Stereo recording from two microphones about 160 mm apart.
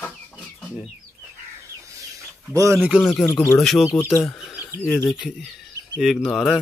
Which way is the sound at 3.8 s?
15° left (ahead or behind).